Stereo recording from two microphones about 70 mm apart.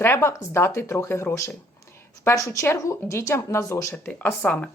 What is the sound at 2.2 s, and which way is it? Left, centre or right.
Speech, left.